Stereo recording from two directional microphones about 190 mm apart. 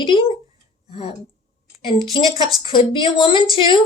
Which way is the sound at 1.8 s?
25° left (ahead or behind).